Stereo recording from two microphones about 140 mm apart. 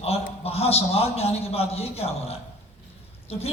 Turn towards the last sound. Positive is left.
turn(degrees=45)  # may be behind; listen again after turning